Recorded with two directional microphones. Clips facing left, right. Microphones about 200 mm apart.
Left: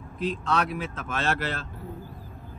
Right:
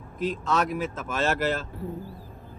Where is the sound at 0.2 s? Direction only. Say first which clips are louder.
Right 1 dB; 45° right (ahead or behind).